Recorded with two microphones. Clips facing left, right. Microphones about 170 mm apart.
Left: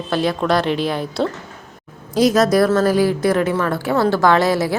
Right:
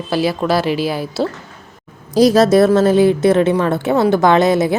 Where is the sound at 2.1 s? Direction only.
35° right (ahead or behind).